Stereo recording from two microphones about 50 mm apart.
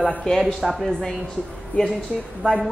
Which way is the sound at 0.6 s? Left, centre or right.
Centre.